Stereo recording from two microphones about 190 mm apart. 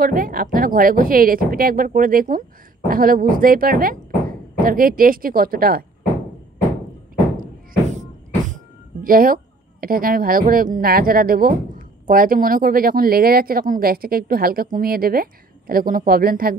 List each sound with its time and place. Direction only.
0.0 s a woman's voice: 50° right (ahead or behind)
9.0 s a woman's voice: 50° right (ahead or behind)